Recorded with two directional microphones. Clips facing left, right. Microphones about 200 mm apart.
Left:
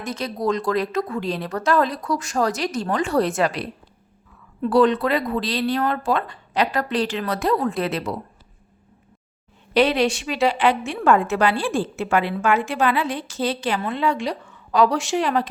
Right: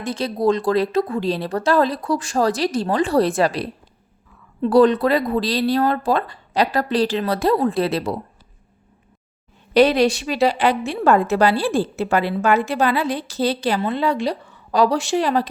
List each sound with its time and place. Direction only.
0.0 s a woman's voice: 30° right (ahead or behind)
9.7 s a woman's voice: 40° right (ahead or behind)